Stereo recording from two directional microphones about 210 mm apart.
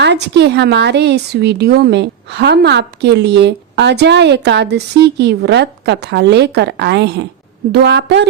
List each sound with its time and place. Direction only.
0.0 s a woman's voice: 55° right (ahead or behind)